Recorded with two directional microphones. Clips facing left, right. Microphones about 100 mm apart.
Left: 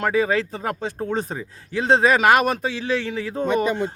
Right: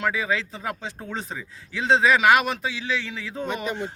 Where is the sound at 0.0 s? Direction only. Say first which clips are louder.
Left 5 dB; 45° left (ahead or behind).